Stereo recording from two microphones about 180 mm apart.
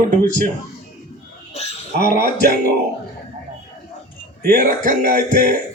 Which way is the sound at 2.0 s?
50° left (ahead or behind).